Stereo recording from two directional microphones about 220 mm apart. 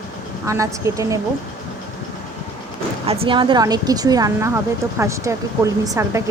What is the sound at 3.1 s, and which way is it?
A woman's voice, 25° right (ahead or behind).